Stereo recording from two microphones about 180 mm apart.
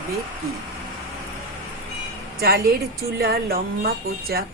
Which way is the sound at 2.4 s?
60° right (ahead or behind).